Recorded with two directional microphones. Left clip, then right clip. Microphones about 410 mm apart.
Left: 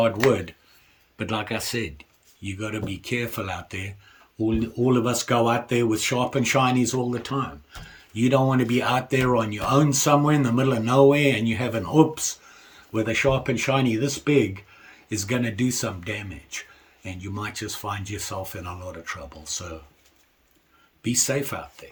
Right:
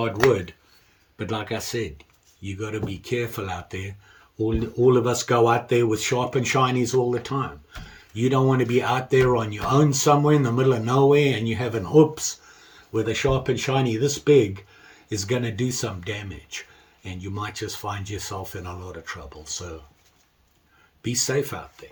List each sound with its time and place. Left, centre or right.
0.2 s speech: centre
21.0 s speech: centre